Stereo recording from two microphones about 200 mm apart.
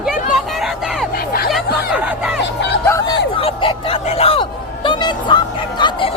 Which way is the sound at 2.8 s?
15° left (ahead or behind).